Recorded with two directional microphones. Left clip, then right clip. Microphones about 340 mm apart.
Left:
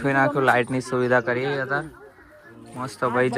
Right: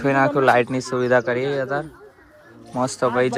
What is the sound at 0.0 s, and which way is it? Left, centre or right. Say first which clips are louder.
Speech: right 3 dB; centre.